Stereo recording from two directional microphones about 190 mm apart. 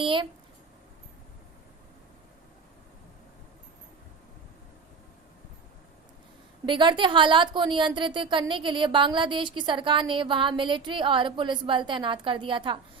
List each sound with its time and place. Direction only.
0.0 s a woman's voice: 25° right (ahead or behind)
6.7 s a woman's voice: 25° right (ahead or behind)